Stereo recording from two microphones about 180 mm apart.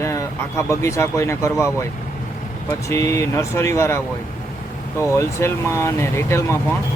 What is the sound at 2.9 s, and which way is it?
Speech, 15° left (ahead or behind).